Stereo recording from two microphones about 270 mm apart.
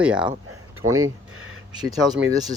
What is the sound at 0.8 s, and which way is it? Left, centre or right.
Speech, right.